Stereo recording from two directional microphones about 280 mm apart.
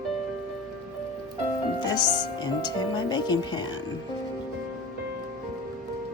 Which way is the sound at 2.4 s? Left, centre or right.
Centre.